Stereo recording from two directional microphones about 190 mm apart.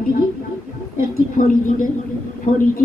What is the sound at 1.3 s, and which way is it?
A woman's voice, 45° left (ahead or behind).